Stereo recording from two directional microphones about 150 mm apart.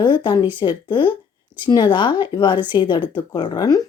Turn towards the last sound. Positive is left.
turn(degrees=25)  # may be behind; listen again after turning